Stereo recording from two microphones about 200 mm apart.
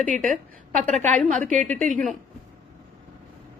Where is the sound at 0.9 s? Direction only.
5° left (ahead or behind).